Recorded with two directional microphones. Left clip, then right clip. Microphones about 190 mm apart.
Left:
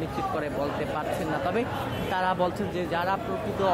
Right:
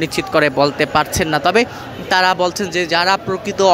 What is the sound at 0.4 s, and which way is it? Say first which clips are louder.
Speech: right 15 dB; 35° right (ahead or behind).